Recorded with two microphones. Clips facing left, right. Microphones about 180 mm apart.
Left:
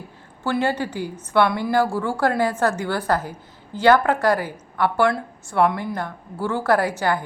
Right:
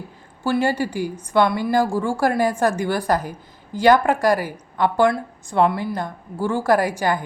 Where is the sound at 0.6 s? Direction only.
10° right (ahead or behind).